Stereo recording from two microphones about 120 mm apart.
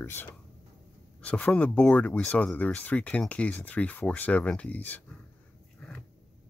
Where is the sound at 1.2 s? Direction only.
10° left (ahead or behind).